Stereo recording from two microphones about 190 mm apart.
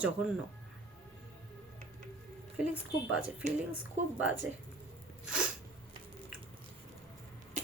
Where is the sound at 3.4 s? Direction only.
40° right (ahead or behind).